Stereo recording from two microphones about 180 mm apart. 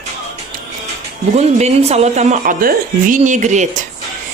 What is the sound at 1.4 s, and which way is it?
Speech, 35° right (ahead or behind).